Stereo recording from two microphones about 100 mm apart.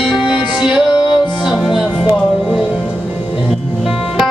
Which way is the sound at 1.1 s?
5° right (ahead or behind).